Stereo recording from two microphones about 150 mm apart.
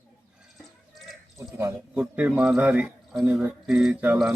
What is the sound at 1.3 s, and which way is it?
Speech, 20° right (ahead or behind).